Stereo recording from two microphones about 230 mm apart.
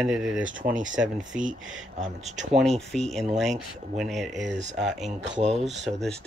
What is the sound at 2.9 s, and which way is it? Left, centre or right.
Speech, centre.